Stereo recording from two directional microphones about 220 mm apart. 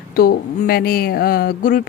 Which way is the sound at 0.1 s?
45° left (ahead or behind).